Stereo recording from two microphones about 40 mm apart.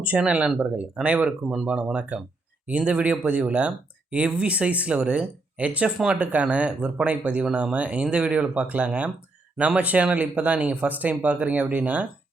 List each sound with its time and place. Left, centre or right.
0.0 s speech: right
9.8 s speech: right